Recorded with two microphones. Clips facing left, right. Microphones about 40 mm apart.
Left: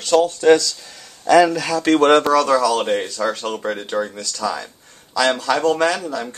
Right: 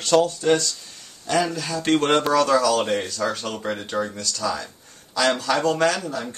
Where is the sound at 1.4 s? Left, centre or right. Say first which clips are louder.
Left 8 dB; left.